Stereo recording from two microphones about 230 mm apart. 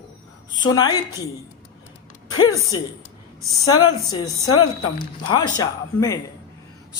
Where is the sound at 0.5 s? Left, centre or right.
Centre.